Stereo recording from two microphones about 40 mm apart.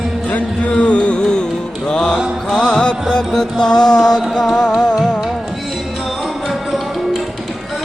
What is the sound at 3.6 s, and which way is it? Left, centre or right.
Mantra, centre.